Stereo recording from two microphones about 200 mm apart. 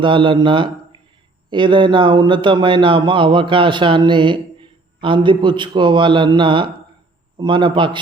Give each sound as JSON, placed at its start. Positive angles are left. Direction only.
{"t": 0.0, "sound": "speech", "side_deg": -25}